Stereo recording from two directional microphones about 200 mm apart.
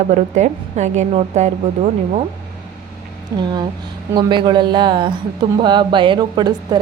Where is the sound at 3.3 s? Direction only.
20° right (ahead or behind).